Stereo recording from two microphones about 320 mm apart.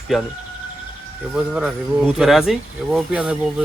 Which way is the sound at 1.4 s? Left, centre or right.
Centre.